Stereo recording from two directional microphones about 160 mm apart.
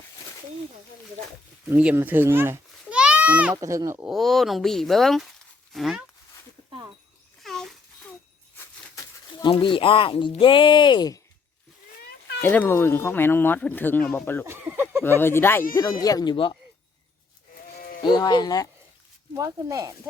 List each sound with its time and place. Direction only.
1.7 s a child's voice: 10° right (ahead or behind)
3.5 s speech: 20° right (ahead or behind)
4.0 s speech: centre (ahead or behind)
6.7 s goat: 30° right (ahead or behind)
7.4 s a sound: centre (ahead or behind)
9.4 s speech: 30° left (ahead or behind)
12.4 s speech: 15° left (ahead or behind)
14.4 s speech: 10° right (ahead or behind)
15.2 s speech: 15° left (ahead or behind); by 16.6 s 30° left (ahead or behind)
18.0 s speech: 25° left (ahead or behind)
19.4 s speech: 20° right (ahead or behind)